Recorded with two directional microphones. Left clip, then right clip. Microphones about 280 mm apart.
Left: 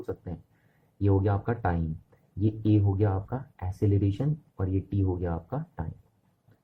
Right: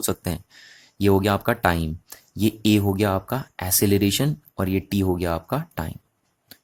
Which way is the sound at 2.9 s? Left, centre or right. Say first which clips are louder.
Right 8 dB; right.